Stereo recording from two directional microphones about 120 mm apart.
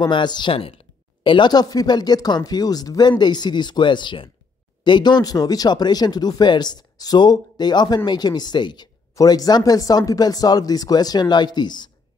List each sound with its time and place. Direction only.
0.0 s speech: 40° left (ahead or behind)